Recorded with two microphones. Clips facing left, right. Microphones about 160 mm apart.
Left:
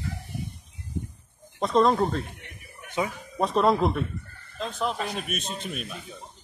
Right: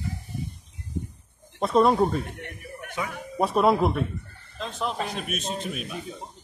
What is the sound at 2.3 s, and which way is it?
Chuckle, 55° right (ahead or behind).